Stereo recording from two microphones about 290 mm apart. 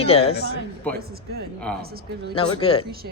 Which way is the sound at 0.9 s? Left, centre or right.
Right.